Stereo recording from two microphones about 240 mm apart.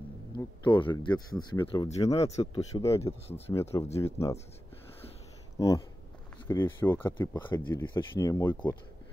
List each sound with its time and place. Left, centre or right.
0.4 s speech: centre
3.1 s speech: left
3.5 s speech: centre
5.6 s speech: centre